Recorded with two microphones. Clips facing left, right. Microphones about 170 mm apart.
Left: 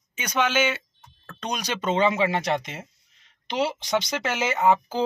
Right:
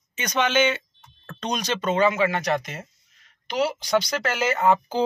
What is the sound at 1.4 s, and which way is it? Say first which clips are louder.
Speech: right 2 dB; 10° left (ahead or behind).